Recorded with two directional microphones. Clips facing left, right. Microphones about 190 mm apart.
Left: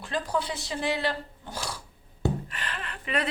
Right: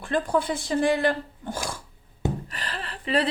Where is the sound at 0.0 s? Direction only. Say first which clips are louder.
Right 5 dB; 50° right (ahead or behind).